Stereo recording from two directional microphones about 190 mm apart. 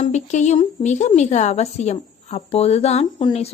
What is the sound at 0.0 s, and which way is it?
A woman's voice, 40° left (ahead or behind).